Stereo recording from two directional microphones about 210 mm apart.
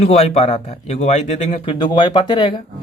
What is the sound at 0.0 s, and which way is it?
Speech, 30° left (ahead or behind).